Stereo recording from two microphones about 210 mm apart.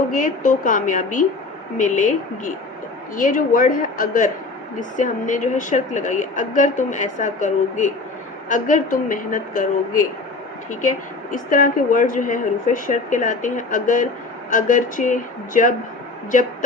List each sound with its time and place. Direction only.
0.1 s a woman's voice: 40° left (ahead or behind)